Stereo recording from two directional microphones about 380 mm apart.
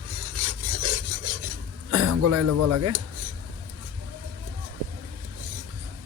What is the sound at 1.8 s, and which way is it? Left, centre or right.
Speech, right.